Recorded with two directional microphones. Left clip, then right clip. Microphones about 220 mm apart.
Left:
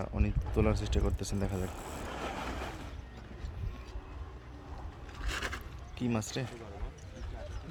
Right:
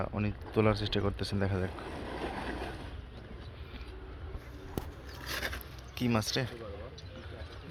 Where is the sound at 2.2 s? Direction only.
30° right (ahead or behind).